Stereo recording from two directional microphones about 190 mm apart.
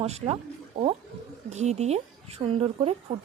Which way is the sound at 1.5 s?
35° right (ahead or behind).